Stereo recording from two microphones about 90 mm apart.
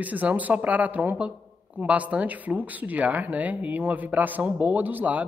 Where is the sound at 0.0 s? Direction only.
15° right (ahead or behind).